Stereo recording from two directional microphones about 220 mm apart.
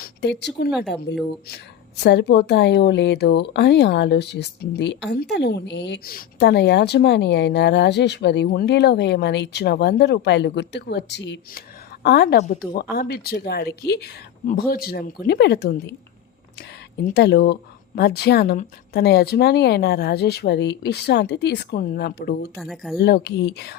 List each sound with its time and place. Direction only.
0.0 s a woman's voice: 50° left (ahead or behind)
12.4 s a woman's voice: 40° left (ahead or behind)
17.1 s a woman's voice: 45° left (ahead or behind)
22.5 s speech: centre (ahead or behind)
23.0 s a woman's voice: 50° left (ahead or behind)